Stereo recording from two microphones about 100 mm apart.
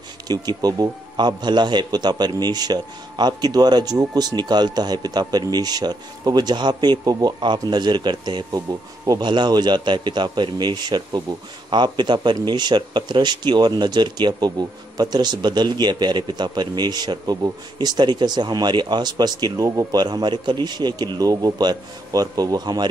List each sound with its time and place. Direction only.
0.3 s a man's voice: 40° right (ahead or behind)
20.0 s a man's voice: 45° right (ahead or behind)